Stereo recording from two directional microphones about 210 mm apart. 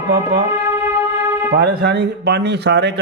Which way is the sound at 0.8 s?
10° right (ahead or behind).